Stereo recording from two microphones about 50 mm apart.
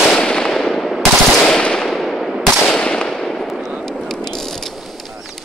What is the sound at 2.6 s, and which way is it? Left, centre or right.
Fireworks, centre.